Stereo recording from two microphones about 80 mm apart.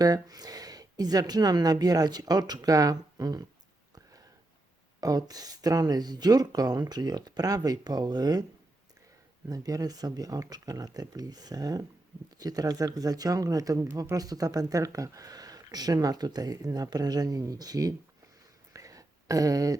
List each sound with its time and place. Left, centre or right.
0.0 s speech: right
4.9 s speech: right
9.5 s speech: right
18.7 s a sound: right